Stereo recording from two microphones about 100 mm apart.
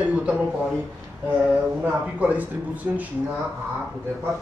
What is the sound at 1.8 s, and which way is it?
Speech, 15° right (ahead or behind).